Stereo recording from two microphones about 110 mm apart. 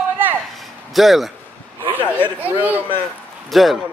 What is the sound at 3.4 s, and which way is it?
Speech, centre (ahead or behind).